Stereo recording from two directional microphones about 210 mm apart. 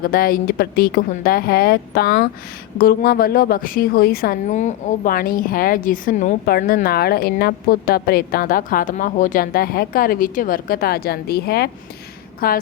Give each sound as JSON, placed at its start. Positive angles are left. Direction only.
{"t": 0.0, "sound": "a woman's voice", "side_deg": 45}